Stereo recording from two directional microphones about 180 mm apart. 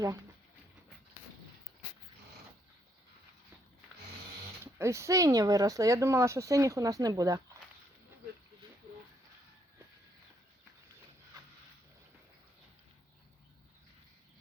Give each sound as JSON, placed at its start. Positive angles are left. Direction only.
{"t": 4.6, "sound": "speech", "side_deg": -15}